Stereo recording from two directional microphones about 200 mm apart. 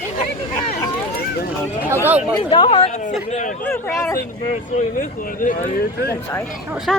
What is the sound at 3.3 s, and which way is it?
Speech, 40° left (ahead or behind).